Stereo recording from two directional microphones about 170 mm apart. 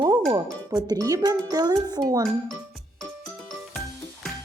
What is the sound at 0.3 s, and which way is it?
A child's voice, 25° right (ahead or behind).